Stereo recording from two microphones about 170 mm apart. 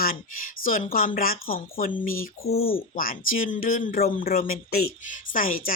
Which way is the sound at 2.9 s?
55° left (ahead or behind).